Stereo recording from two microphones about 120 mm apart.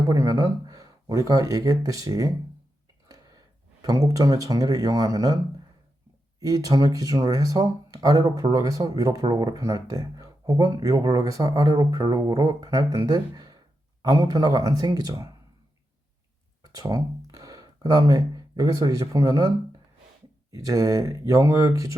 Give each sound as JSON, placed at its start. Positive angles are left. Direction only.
{"t": 0.1, "sound": "speech", "side_deg": -30}
{"t": 6.4, "sound": "speech", "side_deg": -30}
{"t": 16.6, "sound": "speech", "side_deg": -30}